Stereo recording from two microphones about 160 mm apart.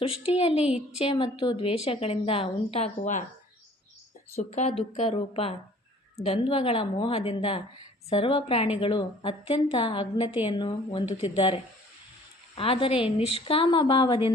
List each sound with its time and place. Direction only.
0.0 s a woman's voice: 35° left (ahead or behind)
0.6 s a woman's voice: 5° right (ahead or behind)
0.9 s a woman's voice: 35° left (ahead or behind); by 3.2 s 50° left (ahead or behind)
4.4 s a woman's voice: 45° left (ahead or behind)